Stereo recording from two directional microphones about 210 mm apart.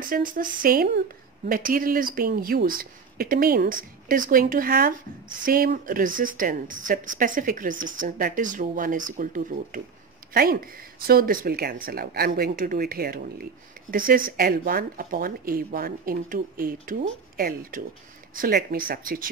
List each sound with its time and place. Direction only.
0.0 s speech: 40° right (ahead or behind)